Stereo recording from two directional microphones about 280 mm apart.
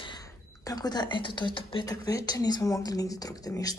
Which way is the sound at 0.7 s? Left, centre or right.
Centre.